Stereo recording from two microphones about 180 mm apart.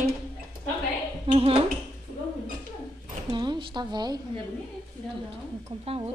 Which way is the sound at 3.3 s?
25° right (ahead or behind).